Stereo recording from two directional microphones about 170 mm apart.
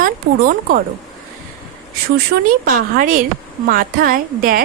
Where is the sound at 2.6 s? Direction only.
55° right (ahead or behind).